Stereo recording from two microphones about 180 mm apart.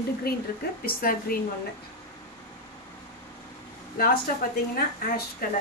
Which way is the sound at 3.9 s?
55° left (ahead or behind).